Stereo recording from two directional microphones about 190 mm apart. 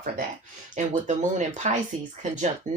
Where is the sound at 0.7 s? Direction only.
40° right (ahead or behind).